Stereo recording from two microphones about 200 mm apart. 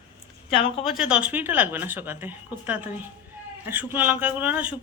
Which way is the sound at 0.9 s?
5° right (ahead or behind).